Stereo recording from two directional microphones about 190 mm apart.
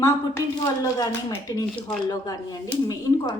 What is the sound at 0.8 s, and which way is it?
A woman's voice, 20° left (ahead or behind).